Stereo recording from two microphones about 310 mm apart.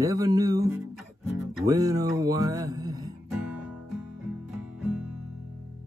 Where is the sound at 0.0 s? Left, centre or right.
Centre.